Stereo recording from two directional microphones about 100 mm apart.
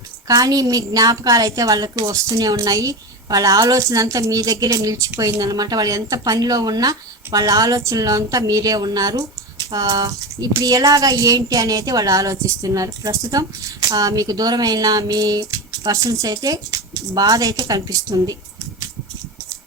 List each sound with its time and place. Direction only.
0.3 s a woman's voice: 35° right (ahead or behind)